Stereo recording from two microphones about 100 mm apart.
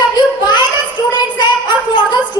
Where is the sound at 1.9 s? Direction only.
50° left (ahead or behind).